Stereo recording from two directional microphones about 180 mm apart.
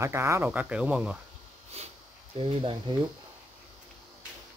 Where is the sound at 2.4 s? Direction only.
30° right (ahead or behind).